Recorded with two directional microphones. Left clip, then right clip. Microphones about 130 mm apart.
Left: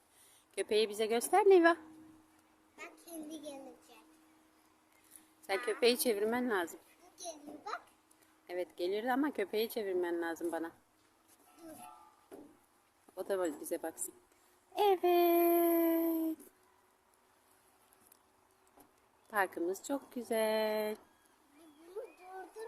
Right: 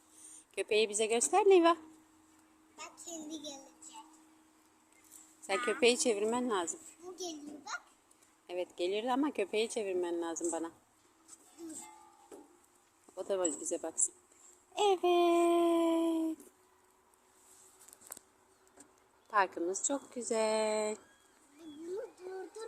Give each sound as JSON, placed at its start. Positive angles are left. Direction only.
{"t": 0.2, "sound": "speech", "side_deg": 0}
{"t": 2.7, "sound": "child singing", "side_deg": 25}
{"t": 5.5, "sound": "speech", "side_deg": 0}
{"t": 8.4, "sound": "speech", "side_deg": 0}
{"t": 13.1, "sound": "speech", "side_deg": 0}
{"t": 19.3, "sound": "a woman's voice", "side_deg": 0}